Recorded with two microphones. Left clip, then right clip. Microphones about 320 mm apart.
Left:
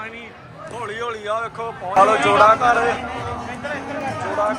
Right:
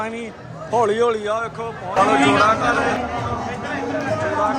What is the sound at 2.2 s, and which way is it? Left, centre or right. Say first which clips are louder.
Speech: left 1 dB; centre.